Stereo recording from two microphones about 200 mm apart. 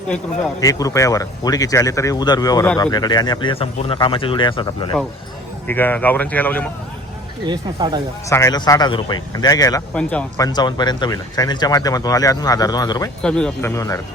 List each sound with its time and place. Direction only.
0.6 s speech: 15° left (ahead or behind)
5.6 s speech: 10° left (ahead or behind)
7.4 s speech: 20° right (ahead or behind)
8.3 s speech: 15° left (ahead or behind)
9.9 s speech: 5° left (ahead or behind)
10.3 s speech: 20° left (ahead or behind)
13.2 s speech: 5° left (ahead or behind)